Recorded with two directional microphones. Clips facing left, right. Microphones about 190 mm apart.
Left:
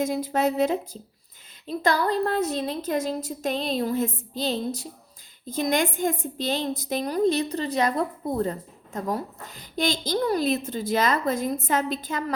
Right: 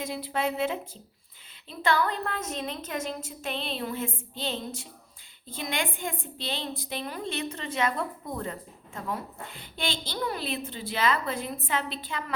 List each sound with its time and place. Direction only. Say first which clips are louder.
0.0 s a woman's voice: left 7 dB; 45° left (ahead or behind)